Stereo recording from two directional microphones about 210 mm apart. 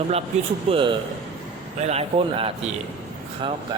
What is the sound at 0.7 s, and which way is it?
Speech, 25° right (ahead or behind).